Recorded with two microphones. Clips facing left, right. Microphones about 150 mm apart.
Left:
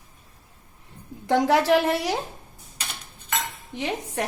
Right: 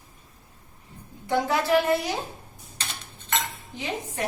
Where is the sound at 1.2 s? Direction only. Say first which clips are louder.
Left 4 dB; 90° left.